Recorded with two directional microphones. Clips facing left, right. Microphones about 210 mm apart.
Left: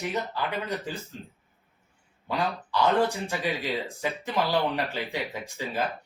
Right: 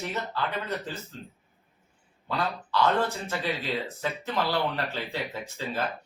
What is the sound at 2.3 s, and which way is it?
A man's voice, 15° left (ahead or behind).